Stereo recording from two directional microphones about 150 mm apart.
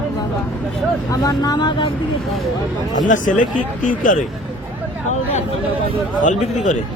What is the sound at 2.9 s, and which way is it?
Speech, 60° left (ahead or behind).